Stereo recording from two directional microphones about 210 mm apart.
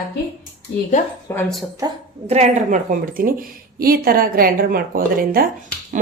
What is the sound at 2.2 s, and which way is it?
A woman's voice, 30° right (ahead or behind).